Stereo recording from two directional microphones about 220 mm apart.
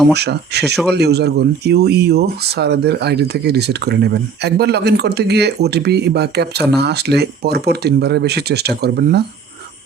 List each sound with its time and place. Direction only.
0.1 s speech: 50° right (ahead or behind)